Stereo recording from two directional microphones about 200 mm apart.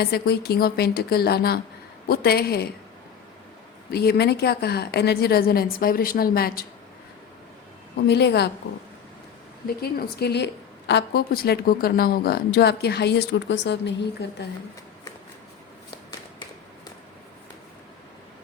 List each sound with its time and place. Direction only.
0.0 s a woman's voice: 50° left (ahead or behind)
3.9 s a woman's voice: 55° left (ahead or behind)
8.0 s a woman's voice: 55° left (ahead or behind)
9.6 s a woman's voice: 50° left (ahead or behind)